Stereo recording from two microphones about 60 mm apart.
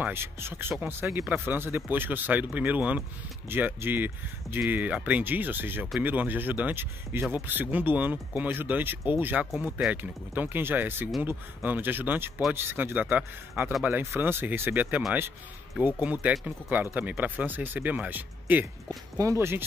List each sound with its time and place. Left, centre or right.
0.0 s speech: right
3.4 s speech: right
14.1 s speech: right
19.2 s speech: right